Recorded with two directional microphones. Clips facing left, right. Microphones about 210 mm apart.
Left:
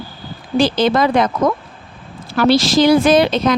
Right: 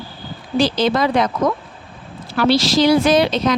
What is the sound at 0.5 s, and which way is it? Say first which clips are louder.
Speech: left 2 dB; 55° left (ahead or behind).